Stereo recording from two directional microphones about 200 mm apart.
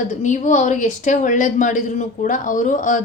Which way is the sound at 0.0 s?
35° left (ahead or behind).